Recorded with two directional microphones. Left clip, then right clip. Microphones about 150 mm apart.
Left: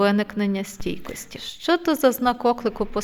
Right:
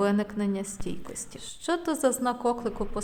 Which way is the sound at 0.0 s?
25° left (ahead or behind).